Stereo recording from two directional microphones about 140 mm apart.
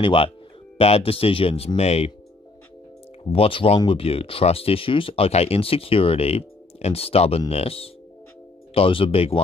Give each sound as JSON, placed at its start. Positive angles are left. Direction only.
{"t": 0.0, "sound": "speech", "side_deg": 40}
{"t": 3.3, "sound": "speech", "side_deg": 40}